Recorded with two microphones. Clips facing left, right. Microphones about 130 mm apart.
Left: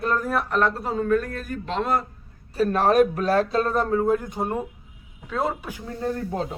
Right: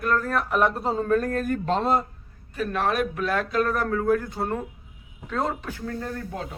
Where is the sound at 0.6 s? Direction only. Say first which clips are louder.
Right 2 dB; 20° right (ahead or behind); by 1.9 s 40° right (ahead or behind).